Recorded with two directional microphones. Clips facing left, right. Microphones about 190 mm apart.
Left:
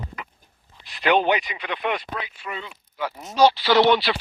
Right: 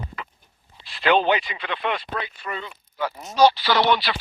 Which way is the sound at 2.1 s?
5° left (ahead or behind).